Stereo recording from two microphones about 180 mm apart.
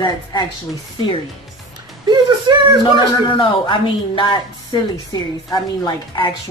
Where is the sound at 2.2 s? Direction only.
25° right (ahead or behind).